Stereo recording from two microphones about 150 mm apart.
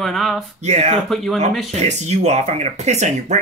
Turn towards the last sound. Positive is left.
turn(degrees=-50)  # may be behind; listen again after turning